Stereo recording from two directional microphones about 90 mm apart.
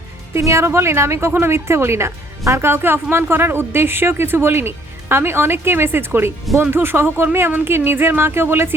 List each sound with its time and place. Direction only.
0.3 s a woman's voice: 30° right (ahead or behind)